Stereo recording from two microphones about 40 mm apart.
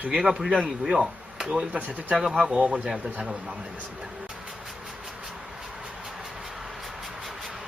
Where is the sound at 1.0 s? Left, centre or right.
Right.